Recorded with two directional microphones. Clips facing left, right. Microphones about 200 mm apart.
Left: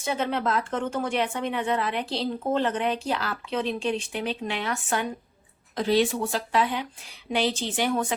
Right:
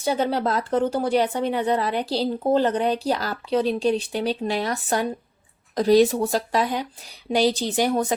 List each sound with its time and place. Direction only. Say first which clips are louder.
0.0 s speech: right 4 dB; 35° right (ahead or behind)